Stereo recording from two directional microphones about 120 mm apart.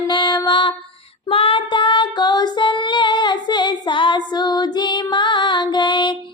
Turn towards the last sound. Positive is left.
turn(degrees=40)  # may be behind; listen again after turning